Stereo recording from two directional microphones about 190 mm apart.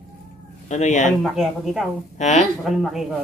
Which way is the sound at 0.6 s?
40° left (ahead or behind).